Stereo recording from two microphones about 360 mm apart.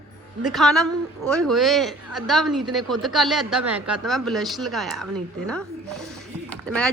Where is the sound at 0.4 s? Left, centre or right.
Centre.